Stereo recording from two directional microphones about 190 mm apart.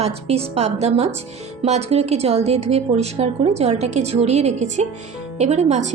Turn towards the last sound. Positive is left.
turn(degrees=-40)  # may be behind; listen again after turning